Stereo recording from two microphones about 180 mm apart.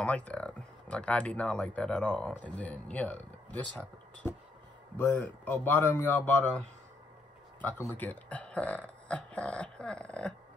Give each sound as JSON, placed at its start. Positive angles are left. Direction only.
{"t": 0.0, "sound": "speech", "side_deg": 5}
{"t": 7.9, "sound": "speech", "side_deg": 10}